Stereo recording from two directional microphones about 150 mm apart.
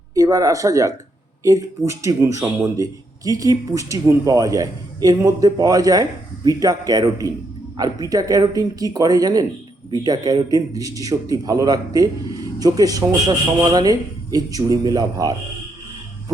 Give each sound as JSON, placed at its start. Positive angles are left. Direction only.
{"t": 0.1, "sound": "a man's voice", "side_deg": -20}